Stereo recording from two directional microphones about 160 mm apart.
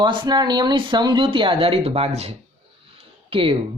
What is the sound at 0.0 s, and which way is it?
Speech, 25° right (ahead or behind).